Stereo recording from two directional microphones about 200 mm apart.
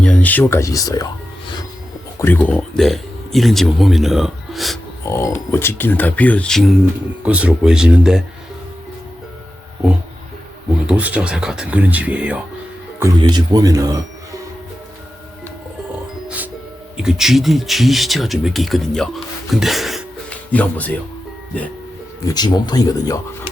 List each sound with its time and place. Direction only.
0.0 s speech: 5° left (ahead or behind)
2.1 s speech: 10° left (ahead or behind)
5.0 s speech: 15° left (ahead or behind); by 8.2 s 5° right (ahead or behind)
10.8 s speech: 5° right (ahead or behind)
13.0 s speech: 20° right (ahead or behind)
17.0 s speech: 5° right (ahead or behind)
22.2 s speech: 20° left (ahead or behind)